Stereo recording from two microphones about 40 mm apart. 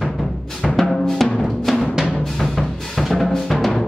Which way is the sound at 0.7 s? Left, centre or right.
Centre.